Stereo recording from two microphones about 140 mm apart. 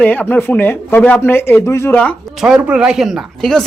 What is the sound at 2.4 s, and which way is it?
Speech, 5° right (ahead or behind).